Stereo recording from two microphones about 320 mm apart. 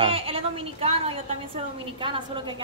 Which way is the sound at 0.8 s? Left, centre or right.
Centre.